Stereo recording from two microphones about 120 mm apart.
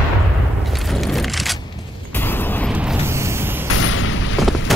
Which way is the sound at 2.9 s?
20° right (ahead or behind).